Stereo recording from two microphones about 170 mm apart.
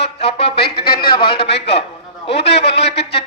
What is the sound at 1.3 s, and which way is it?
A man's voice, 80° left.